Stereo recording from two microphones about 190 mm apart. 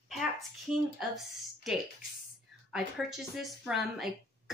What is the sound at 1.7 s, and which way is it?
Speech, centre (ahead or behind).